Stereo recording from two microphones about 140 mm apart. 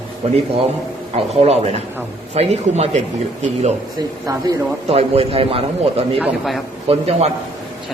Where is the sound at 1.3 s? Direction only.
50° right (ahead or behind).